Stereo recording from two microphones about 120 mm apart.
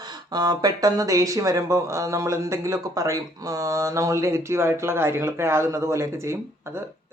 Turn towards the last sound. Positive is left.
turn(degrees=-20)  # may be behind; listen again after turning